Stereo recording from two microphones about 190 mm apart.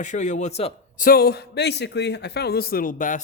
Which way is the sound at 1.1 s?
55° left (ahead or behind).